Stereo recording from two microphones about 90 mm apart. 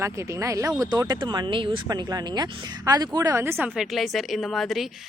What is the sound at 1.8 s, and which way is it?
Speech, 50° right (ahead or behind).